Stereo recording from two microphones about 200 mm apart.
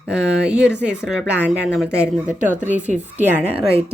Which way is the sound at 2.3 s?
40° right (ahead or behind).